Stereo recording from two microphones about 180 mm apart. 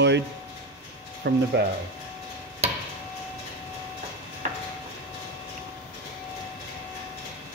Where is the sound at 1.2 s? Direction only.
65° right (ahead or behind).